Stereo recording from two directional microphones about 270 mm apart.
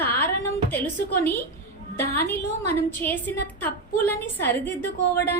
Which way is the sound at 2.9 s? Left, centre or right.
Centre.